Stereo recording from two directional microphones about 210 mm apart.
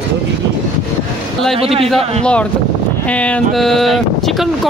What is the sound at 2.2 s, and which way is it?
Speech, 5° left (ahead or behind).